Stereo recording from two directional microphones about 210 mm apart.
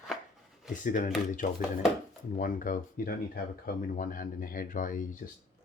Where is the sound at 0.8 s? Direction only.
40° left (ahead or behind).